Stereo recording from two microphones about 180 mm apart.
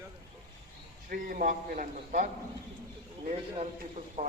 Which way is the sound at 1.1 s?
50° right (ahead or behind).